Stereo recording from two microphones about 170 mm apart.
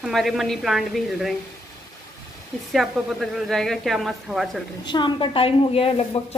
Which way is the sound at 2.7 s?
Centre (ahead or behind).